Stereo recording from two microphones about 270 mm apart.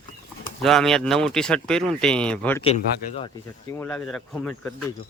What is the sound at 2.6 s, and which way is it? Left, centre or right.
Speech, left.